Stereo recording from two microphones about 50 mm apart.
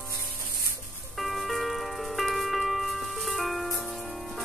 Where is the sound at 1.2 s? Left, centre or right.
Centre.